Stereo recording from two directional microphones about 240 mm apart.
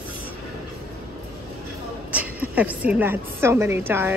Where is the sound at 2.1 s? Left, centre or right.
Centre.